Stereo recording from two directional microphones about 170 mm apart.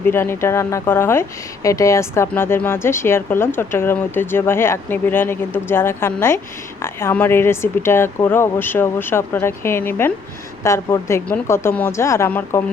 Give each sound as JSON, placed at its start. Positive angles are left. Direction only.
{"t": 0.0, "sound": "speech", "side_deg": 15}